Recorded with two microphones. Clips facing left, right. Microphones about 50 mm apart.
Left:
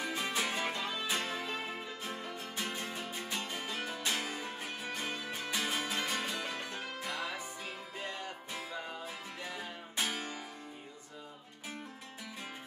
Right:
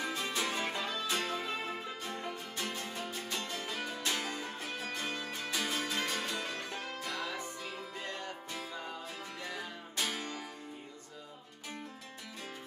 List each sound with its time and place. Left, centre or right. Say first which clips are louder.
0.0 s music: even; centre